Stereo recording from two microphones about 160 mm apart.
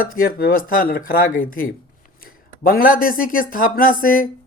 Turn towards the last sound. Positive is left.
turn(degrees=60)  # may be behind; listen again after turning